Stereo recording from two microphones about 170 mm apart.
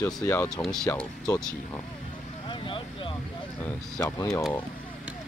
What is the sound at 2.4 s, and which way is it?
Vehicle, 30° left (ahead or behind).